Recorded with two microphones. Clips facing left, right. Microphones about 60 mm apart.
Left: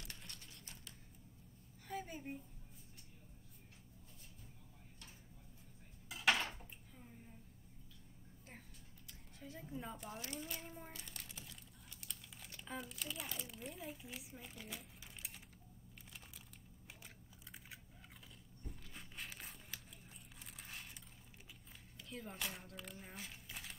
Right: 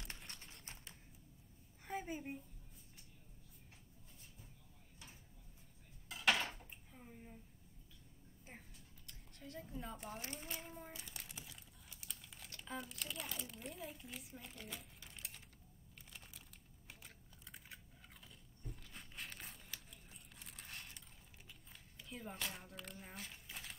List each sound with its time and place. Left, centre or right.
0.4 s clip-clop: right
2.0 s a sound: centre
6.0 s dishes: centre
9.0 s a sound: centre
10.1 s speech: right
10.6 s child singing: centre
11.0 s crumpling: centre
12.0 s speech: centre
17.0 s typing: centre
18.7 s crumpling: centre
20.4 s a sound: centre
22.1 s speech: centre